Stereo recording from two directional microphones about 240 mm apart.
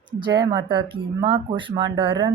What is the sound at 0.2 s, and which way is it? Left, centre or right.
Speech, centre.